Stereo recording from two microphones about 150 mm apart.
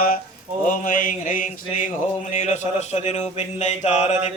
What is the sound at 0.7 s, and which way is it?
Mantra, 60° left (ahead or behind).